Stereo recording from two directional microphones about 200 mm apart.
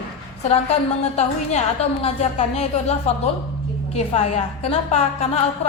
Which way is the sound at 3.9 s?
30° left (ahead or behind).